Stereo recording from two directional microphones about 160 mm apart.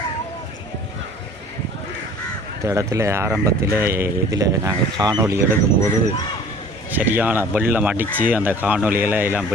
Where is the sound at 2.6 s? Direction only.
20° right (ahead or behind).